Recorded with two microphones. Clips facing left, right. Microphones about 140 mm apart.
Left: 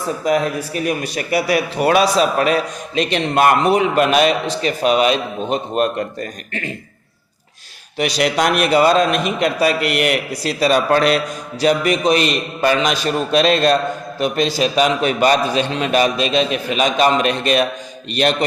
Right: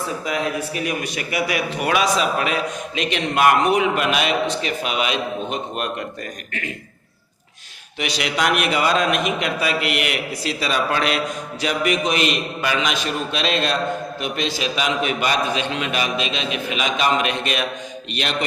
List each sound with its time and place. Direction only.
0.3 s a man's voice: 40° left (ahead or behind)
7.9 s a man's voice: 40° left (ahead or behind)